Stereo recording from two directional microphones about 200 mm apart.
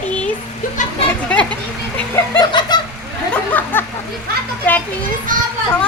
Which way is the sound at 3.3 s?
10° left (ahead or behind).